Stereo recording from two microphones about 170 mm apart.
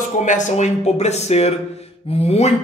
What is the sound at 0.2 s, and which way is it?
Speech, 45° left (ahead or behind).